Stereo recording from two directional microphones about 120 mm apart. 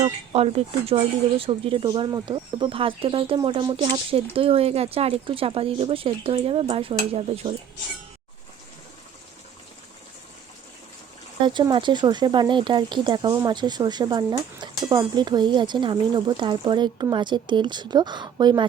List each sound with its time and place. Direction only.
0.3 s speech: 60° right (ahead or behind)
2.0 s speech: 35° right (ahead or behind); by 7.5 s 55° right (ahead or behind)
11.4 s speech: 40° right (ahead or behind)